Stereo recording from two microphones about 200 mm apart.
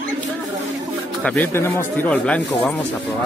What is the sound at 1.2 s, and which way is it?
Speech, 10° left (ahead or behind).